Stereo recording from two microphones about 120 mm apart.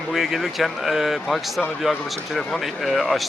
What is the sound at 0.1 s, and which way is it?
Speech, centre (ahead or behind).